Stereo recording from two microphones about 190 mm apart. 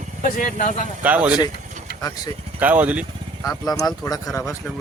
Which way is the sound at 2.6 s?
10° right (ahead or behind).